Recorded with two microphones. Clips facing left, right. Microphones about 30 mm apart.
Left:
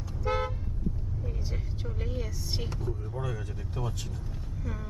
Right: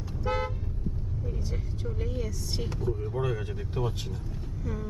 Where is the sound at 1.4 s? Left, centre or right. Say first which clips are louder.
Right 2 dB; centre.